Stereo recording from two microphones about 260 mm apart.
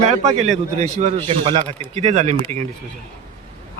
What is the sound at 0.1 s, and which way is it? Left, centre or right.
A man's voice, right.